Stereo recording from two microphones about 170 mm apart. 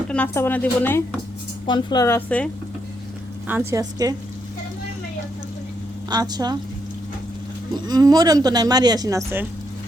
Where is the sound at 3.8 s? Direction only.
20° right (ahead or behind).